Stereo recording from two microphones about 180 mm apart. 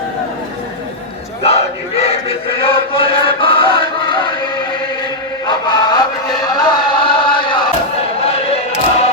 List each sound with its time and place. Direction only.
2.0 s chant: 30° left (ahead or behind)
5.5 s music: 25° left (ahead or behind)
8.2 s a sound: 35° left (ahead or behind)